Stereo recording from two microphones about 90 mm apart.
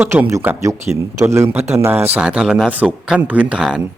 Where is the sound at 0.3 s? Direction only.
35° right (ahead or behind).